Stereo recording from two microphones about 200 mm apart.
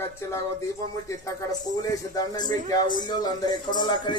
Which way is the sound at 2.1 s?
20° left (ahead or behind).